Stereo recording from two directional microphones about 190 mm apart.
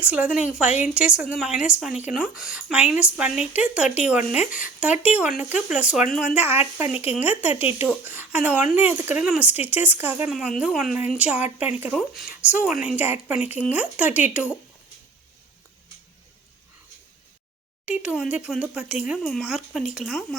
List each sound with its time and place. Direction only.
0.0 s speech: 5° right (ahead or behind)
4.4 s speech: 45° left (ahead or behind)
4.8 s speech: 5° right (ahead or behind)
17.8 s speech: 5° right (ahead or behind)